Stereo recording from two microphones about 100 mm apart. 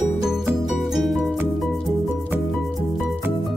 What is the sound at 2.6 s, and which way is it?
Music, centre (ahead or behind).